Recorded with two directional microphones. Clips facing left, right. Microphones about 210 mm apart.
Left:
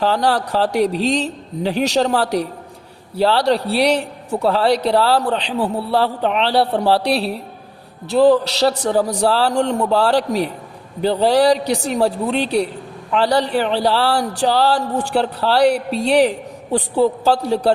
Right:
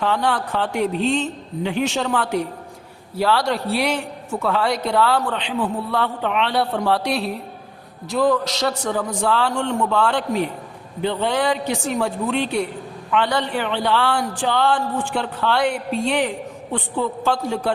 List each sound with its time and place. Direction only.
0.0 s a man's voice: 35° left (ahead or behind)